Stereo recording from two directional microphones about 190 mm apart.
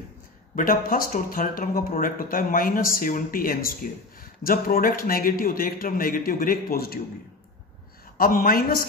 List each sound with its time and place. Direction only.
0.6 s speech: 50° left (ahead or behind)
8.2 s speech: 50° left (ahead or behind)